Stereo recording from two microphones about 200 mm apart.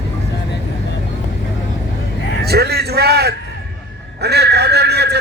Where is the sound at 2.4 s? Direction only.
55° right (ahead or behind).